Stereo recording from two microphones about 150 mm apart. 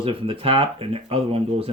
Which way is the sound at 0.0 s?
35° right (ahead or behind).